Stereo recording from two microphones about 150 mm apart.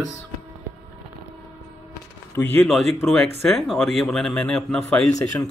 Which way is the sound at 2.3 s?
15° left (ahead or behind).